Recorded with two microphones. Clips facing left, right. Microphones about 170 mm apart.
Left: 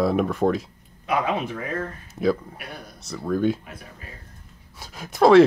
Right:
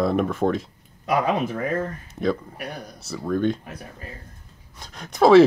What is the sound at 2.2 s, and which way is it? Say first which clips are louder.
Speech: left 2 dB; 5° left (ahead or behind).